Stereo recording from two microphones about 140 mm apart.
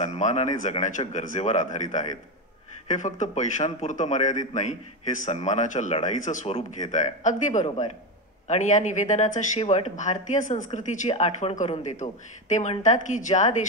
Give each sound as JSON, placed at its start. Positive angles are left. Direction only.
{"t": 0.0, "sound": "speech", "side_deg": 55}